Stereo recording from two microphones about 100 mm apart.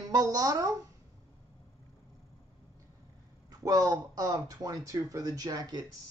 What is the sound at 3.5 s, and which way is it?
A woman's voice, 35° right (ahead or behind).